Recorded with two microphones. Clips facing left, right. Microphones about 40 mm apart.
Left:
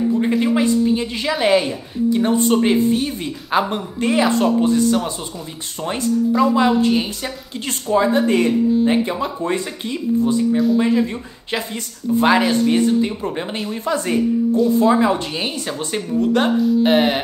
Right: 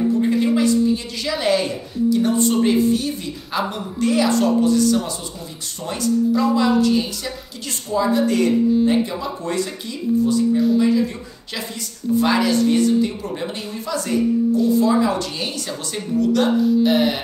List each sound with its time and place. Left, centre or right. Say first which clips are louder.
0.6 s a woman's voice: left 1 dB; left
6.5 s speech: left 1 dB; left